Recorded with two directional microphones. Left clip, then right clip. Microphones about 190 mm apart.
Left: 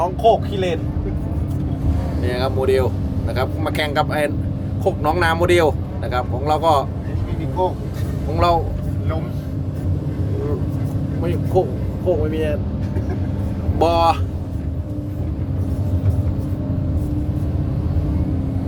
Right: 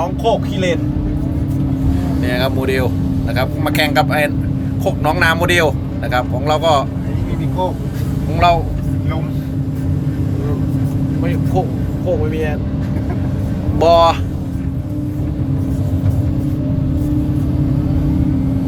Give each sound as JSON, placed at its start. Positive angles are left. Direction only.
{"t": 2.2, "sound": "speech", "side_deg": 15}
{"t": 8.4, "sound": "speech", "side_deg": 20}
{"t": 11.2, "sound": "speech", "side_deg": 25}
{"t": 13.7, "sound": "speech", "side_deg": 25}